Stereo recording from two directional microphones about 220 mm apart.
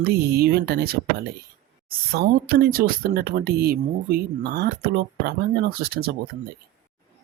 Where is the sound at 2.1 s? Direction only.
45° right (ahead or behind).